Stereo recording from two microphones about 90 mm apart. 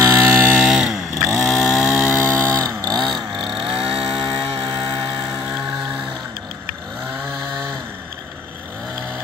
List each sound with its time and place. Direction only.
0.0 s chainsaw: 25° right (ahead or behind)
0.6 s chainsaw: 5° right (ahead or behind)
2.2 s a sound: 35° right (ahead or behind)
2.8 s vehicle: 50° right (ahead or behind)
3.5 s chainsaw: 85° right
4.6 s a sound: 50° right (ahead or behind)